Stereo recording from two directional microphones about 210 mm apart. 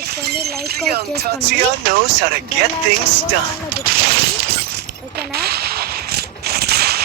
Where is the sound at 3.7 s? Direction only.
45° right (ahead or behind).